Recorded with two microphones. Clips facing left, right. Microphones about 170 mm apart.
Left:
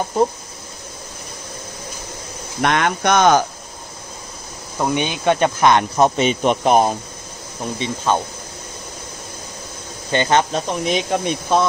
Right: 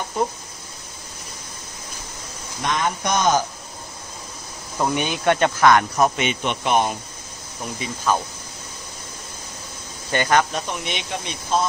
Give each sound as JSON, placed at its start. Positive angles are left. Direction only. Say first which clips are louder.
{"t": 2.6, "sound": "speech", "louder": "left 5 dB", "side_deg": 70}
{"t": 4.7, "sound": "speech", "louder": "left 2 dB", "side_deg": 15}
{"t": 7.8, "sound": "speech", "louder": "left 3 dB", "side_deg": 25}
{"t": 10.1, "sound": "speech", "louder": "left 3 dB", "side_deg": 25}